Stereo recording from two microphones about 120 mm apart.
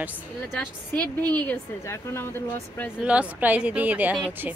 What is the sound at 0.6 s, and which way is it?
A woman's voice, 15° left (ahead or behind).